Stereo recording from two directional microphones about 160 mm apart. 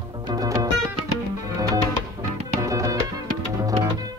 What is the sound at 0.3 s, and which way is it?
Music, 20° right (ahead or behind).